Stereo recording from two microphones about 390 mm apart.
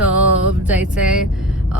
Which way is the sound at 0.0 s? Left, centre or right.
Centre.